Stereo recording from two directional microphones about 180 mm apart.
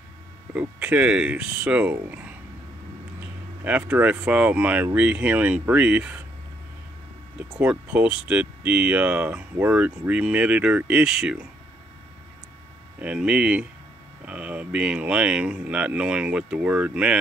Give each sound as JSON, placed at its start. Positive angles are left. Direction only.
{"t": 0.6, "sound": "speech", "side_deg": -10}
{"t": 3.6, "sound": "speech", "side_deg": -10}
{"t": 7.5, "sound": "speech", "side_deg": -5}
{"t": 13.0, "sound": "speech", "side_deg": -5}